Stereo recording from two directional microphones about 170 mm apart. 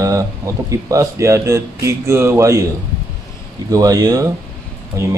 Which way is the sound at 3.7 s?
20° right (ahead or behind).